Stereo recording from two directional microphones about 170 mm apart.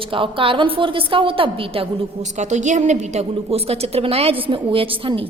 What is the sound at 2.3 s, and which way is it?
A woman's voice, 45° right (ahead or behind).